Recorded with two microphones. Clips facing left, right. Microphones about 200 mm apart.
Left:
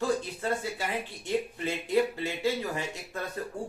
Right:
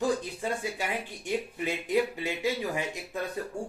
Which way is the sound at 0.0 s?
15° right (ahead or behind).